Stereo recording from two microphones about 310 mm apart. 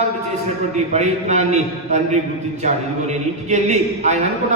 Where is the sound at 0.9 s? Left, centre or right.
Right.